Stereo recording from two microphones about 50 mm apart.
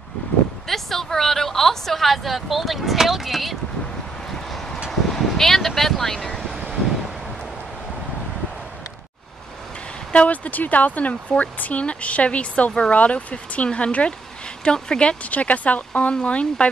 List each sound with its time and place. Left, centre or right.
0.7 s speech: centre
4.3 s a sound: centre
5.0 s vehicle: centre
10.1 s speech: left
15.3 s speech: left